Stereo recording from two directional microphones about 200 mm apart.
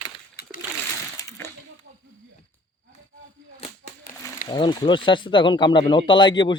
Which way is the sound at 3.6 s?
35° left (ahead or behind).